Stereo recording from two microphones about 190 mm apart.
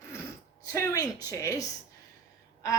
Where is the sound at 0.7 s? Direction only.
15° left (ahead or behind).